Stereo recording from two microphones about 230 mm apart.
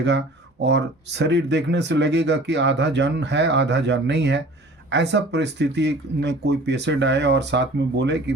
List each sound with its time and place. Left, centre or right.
0.6 s speech: right